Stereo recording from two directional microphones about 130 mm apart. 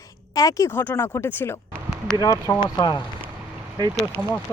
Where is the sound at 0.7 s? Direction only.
15° left (ahead or behind); by 3.0 s 35° left (ahead or behind).